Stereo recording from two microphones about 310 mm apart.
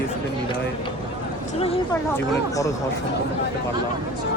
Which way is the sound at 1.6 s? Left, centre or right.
Centre.